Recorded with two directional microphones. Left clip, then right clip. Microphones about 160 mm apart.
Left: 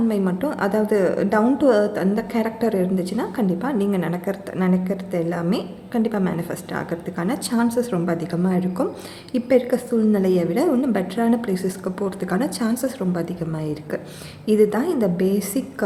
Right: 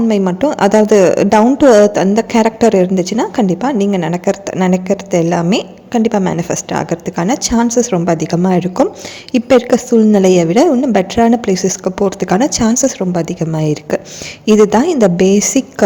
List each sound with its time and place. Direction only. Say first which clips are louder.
0.1 s a woman's voice: right 10 dB; 40° right (ahead or behind)